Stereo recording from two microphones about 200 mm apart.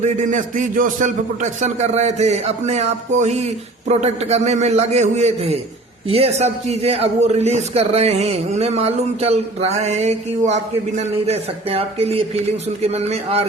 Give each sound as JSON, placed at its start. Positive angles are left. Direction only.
{"t": 0.0, "sound": "a man's voice", "side_deg": -40}